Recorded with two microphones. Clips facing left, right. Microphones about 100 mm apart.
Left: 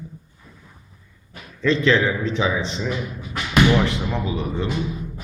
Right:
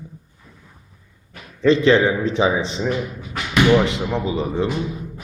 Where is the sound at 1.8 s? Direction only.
30° right (ahead or behind).